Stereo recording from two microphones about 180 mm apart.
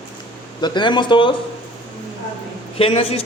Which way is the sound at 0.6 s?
25° left (ahead or behind).